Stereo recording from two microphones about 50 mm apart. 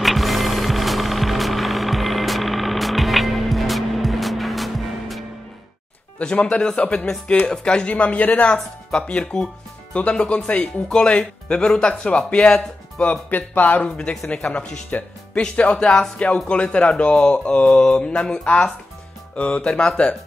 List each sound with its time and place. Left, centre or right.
0.0 s music: centre
6.1 s speech: left
13.3 s speech: left
13.8 s speech: centre
14.9 s speech: left